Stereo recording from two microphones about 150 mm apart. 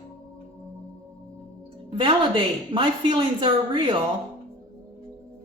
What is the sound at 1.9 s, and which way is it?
A woman's voice, 35° right (ahead or behind).